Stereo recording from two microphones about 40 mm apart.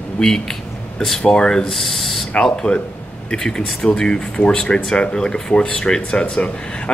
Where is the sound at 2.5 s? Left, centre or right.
Left.